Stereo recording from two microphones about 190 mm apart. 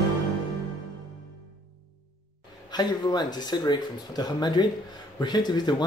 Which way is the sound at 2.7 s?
20° left (ahead or behind).